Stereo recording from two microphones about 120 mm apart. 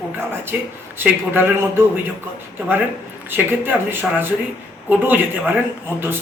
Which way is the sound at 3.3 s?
15° right (ahead or behind).